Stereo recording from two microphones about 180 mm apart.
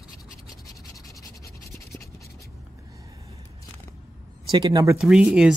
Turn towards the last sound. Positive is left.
turn(degrees=-5)  # may be behind; listen again after turning